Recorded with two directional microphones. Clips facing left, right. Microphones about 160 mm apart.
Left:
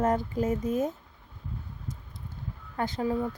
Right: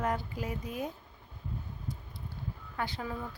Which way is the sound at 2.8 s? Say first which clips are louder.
Left 8 dB; 45° left (ahead or behind).